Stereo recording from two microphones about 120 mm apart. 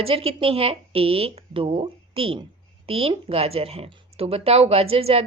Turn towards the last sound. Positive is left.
turn(degrees=-55)  # may be behind; listen again after turning